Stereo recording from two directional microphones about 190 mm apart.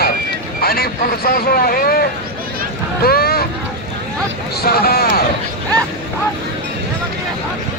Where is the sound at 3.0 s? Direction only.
55° left (ahead or behind).